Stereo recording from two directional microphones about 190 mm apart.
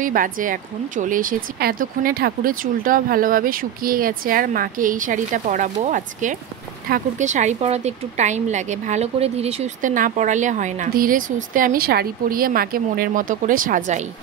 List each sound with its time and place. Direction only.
0.0 s a woman's voice: 45° right (ahead or behind)